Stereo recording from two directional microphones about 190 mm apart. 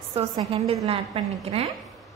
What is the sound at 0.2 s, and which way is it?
A woman's voice, 30° right (ahead or behind).